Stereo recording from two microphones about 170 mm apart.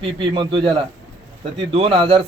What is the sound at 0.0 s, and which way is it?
A man's voice, 30° right (ahead or behind).